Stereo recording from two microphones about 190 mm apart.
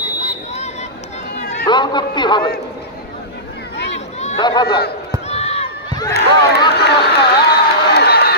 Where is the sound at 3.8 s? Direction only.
65° left (ahead or behind).